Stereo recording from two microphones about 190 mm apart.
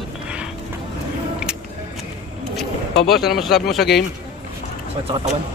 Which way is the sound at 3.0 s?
Centre (ahead or behind).